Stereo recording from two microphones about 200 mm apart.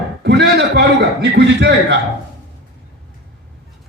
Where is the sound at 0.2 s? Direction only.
60° right (ahead or behind).